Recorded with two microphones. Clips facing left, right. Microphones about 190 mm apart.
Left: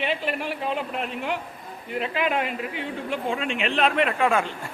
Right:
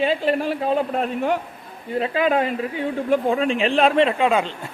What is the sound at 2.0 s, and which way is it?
A man's voice, 35° right (ahead or behind).